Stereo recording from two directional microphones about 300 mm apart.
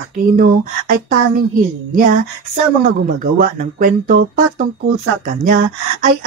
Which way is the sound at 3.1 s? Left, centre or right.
Right.